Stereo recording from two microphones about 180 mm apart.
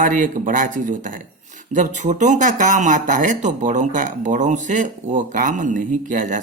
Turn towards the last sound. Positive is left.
turn(degrees=-45)  # may be behind; listen again after turning